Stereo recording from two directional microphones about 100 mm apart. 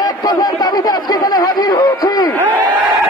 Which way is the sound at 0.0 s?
40° left (ahead or behind).